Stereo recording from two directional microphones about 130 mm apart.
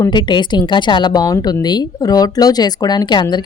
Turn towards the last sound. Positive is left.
turn(degrees=35)  # may be behind; listen again after turning